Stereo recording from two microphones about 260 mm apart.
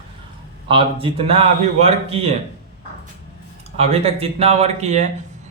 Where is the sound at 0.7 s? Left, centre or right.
Centre.